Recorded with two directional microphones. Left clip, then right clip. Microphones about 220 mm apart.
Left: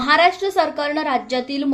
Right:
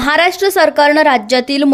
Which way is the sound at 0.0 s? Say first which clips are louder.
Right 4 dB; 50° right (ahead or behind).